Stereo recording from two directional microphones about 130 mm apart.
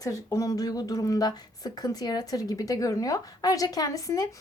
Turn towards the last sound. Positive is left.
turn(degrees=30)  # may be behind; listen again after turning